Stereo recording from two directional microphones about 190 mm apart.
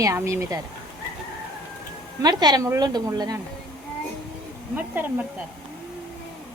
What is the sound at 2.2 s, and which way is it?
A woman's voice, 20° right (ahead or behind).